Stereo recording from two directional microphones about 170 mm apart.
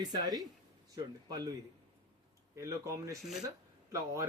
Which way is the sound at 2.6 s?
20° right (ahead or behind).